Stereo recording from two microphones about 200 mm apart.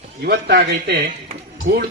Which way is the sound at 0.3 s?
50° right (ahead or behind).